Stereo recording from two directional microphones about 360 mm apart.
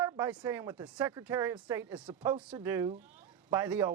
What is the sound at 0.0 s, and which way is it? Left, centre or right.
A woman's voice, centre.